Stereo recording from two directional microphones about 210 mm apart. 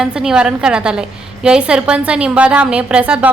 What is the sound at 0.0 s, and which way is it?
A woman's voice, 5° right (ahead or behind).